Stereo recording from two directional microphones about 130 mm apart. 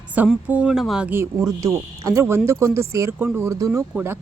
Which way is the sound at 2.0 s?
20° right (ahead or behind).